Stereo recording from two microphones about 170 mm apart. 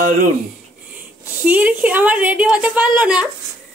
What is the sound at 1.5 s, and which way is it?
A woman's voice, 10° right (ahead or behind).